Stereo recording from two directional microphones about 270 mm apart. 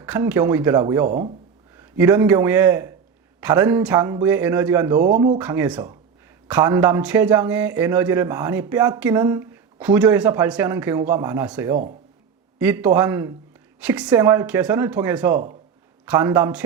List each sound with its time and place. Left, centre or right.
0.0 s a man's voice: centre
5.4 s speech: centre